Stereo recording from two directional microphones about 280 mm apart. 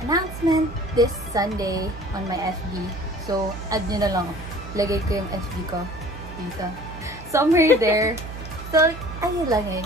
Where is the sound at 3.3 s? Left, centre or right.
Centre.